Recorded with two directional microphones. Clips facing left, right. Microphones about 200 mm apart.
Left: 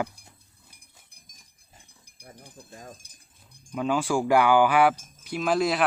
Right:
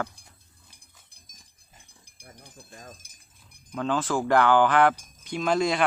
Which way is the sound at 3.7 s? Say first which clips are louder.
Left 1 dB; 10° left (ahead or behind).